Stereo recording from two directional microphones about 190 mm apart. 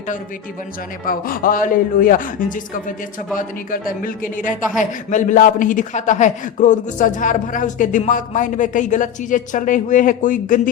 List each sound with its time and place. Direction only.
1.0 s a man's voice: 50° left (ahead or behind)